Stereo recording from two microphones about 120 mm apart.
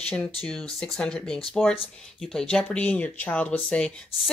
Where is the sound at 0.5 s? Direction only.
5° left (ahead or behind).